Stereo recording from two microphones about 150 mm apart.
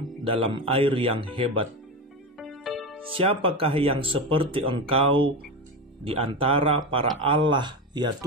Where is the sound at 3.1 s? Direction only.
35° right (ahead or behind).